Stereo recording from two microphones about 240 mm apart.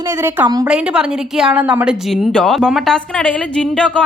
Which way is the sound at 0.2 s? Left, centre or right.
Centre.